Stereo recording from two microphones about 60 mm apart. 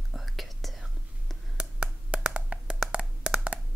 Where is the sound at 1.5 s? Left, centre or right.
Centre.